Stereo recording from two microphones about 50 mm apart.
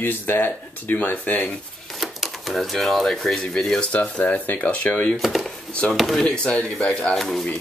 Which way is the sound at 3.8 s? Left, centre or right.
Left.